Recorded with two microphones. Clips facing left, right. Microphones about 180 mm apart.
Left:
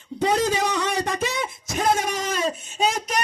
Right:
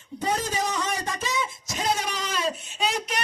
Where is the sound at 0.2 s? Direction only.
80° left.